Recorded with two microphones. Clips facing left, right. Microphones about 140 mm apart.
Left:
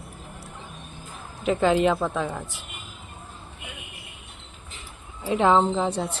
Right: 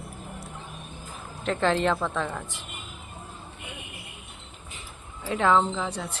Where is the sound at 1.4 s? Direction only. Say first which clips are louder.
Left 4 dB; 10° left (ahead or behind).